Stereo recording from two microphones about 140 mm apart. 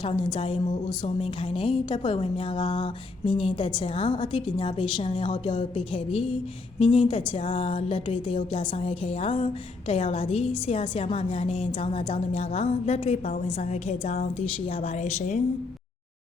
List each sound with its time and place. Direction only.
0.0 s a woman's voice: 35° left (ahead or behind); by 15.4 s 60° left (ahead or behind)